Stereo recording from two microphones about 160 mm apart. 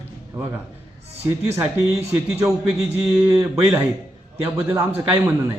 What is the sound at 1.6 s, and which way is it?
Speech, 20° right (ahead or behind).